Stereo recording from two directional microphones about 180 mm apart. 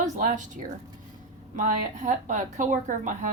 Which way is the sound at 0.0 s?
45° right (ahead or behind).